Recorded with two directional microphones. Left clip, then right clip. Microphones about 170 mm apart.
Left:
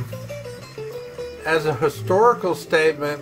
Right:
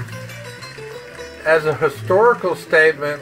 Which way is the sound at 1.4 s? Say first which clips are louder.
Right 4 dB; 10° left (ahead or behind).